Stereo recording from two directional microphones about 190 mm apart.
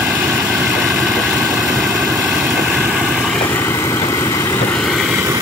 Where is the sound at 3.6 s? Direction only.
15° left (ahead or behind).